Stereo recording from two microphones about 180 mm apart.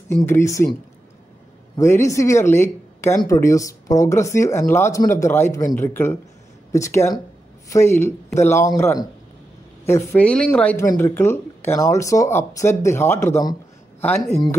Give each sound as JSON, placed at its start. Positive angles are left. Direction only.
{"t": 0.1, "sound": "speech", "side_deg": 15}
{"t": 1.8, "sound": "speech", "side_deg": 15}